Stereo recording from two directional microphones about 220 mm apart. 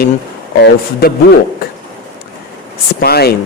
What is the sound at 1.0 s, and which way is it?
Speech, 45° left (ahead or behind).